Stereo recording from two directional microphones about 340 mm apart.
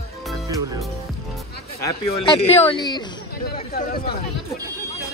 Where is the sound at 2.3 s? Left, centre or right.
Centre.